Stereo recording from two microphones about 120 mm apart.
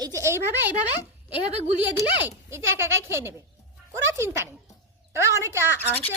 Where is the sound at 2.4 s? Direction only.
20° right (ahead or behind).